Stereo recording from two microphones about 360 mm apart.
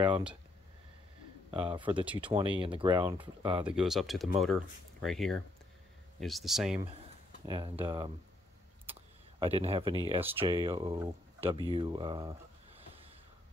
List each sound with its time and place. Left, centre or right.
0.0 s speech: centre
1.5 s speech: centre
3.6 s speech: centre
7.4 s speech: centre
9.4 s speech: centre